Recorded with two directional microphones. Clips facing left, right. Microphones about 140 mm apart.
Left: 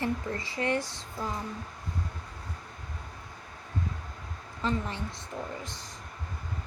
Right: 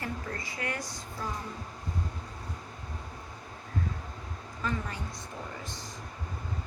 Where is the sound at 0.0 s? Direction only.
30° left (ahead or behind).